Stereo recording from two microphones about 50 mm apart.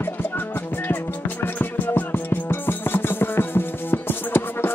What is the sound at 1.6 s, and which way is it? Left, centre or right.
Music, left.